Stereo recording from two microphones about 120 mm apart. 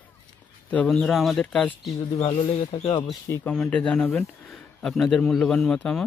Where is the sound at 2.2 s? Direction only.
60° left (ahead or behind).